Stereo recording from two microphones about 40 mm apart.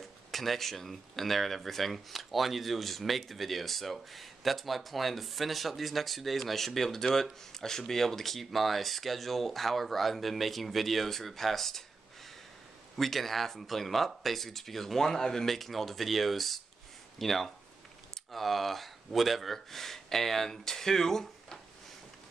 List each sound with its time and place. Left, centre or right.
0.3 s speech: centre
12.9 s speech: centre